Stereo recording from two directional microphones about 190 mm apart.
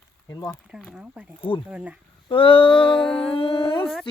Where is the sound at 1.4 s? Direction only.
25° left (ahead or behind).